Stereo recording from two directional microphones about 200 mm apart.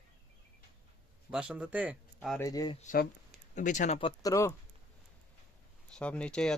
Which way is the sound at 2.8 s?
45° left (ahead or behind).